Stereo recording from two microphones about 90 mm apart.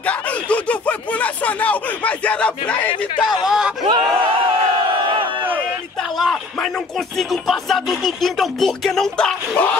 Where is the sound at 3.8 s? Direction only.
60° right (ahead or behind).